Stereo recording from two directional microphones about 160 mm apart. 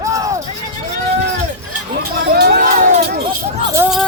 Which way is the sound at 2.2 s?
80° right.